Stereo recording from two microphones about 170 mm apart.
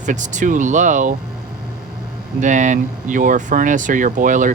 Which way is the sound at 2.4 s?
45° right (ahead or behind).